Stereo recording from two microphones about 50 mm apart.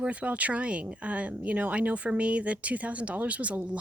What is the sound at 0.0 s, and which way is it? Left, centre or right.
Speech, right.